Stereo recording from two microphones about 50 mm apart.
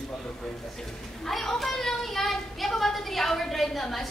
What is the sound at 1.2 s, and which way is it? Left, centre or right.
Speech, centre.